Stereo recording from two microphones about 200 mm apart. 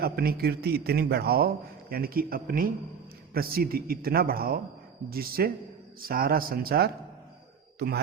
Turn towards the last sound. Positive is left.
turn(degrees=-55)  # may be behind; listen again after turning